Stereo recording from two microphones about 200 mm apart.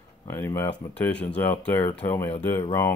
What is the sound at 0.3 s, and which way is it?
Speech, 15° left (ahead or behind).